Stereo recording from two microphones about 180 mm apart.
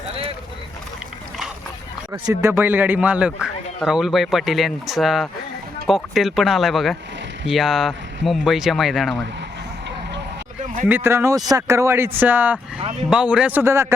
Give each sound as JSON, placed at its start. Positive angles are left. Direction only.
{"t": 0.1, "sound": "boat", "side_deg": -35}
{"t": 2.1, "sound": "speech", "side_deg": -20}
{"t": 10.8, "sound": "speech", "side_deg": -10}